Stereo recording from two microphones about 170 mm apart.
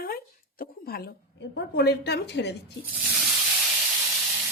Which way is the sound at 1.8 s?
75° left (ahead or behind).